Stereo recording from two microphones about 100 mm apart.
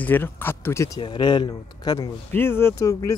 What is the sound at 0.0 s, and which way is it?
Speech, 20° left (ahead or behind).